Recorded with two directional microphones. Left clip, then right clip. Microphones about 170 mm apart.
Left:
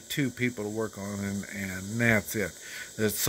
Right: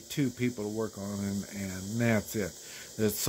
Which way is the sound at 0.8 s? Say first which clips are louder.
Left 2 dB; 20° left (ahead or behind).